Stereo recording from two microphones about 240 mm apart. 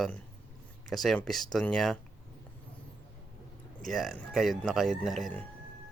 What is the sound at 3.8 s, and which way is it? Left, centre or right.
Speech, centre.